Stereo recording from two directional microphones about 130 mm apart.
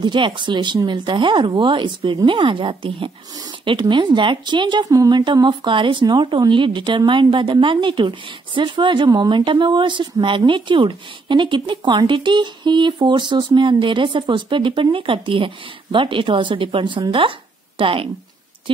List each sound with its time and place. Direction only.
0.0 s a woman's voice: 35° right (ahead or behind)